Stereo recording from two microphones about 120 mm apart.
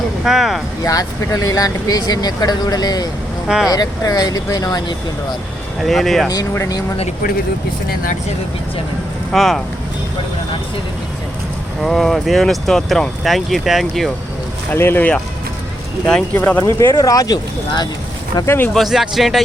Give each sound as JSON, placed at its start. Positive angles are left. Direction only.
{"t": 0.3, "sound": "speech", "side_deg": 0}
{"t": 0.9, "sound": "speech", "side_deg": 30}
{"t": 3.4, "sound": "speech", "side_deg": -5}
{"t": 3.7, "sound": "speech", "side_deg": 30}
{"t": 5.8, "sound": "speech", "side_deg": 0}
{"t": 9.3, "sound": "speech", "side_deg": 0}
{"t": 11.8, "sound": "speech", "side_deg": 0}
{"t": 14.7, "sound": "speech", "side_deg": 15}
{"t": 18.4, "sound": "speech", "side_deg": 20}
{"t": 18.7, "sound": "speech", "side_deg": 0}